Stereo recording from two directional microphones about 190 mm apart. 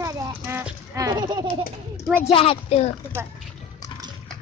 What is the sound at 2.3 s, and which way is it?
Speech, 30° left (ahead or behind).